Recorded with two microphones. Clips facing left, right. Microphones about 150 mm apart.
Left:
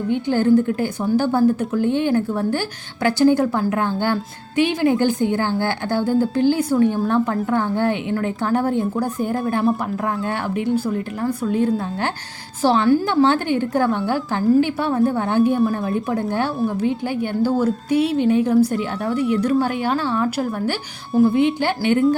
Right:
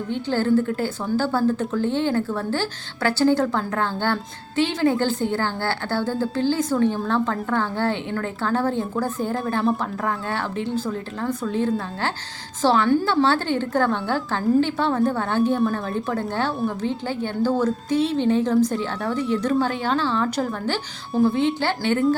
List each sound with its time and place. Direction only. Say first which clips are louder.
0.1 s a woman's voice: left 4 dB; 15° left (ahead or behind)
10.5 s a woman's voice: left 5 dB; 10° left (ahead or behind)
12.9 s a woman's voice: left 3 dB; 5° left (ahead or behind)